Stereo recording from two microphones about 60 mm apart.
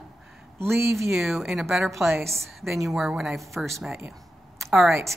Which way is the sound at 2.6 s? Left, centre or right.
Centre.